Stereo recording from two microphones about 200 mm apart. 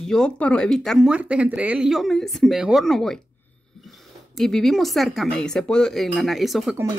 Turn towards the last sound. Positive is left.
turn(degrees=0)  # may be behind; listen again after turning